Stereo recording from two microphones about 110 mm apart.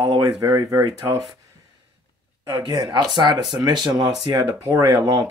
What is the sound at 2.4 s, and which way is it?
Speech, 40° right (ahead or behind).